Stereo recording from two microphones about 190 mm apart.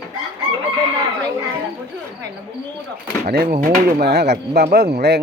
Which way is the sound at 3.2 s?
50° right (ahead or behind).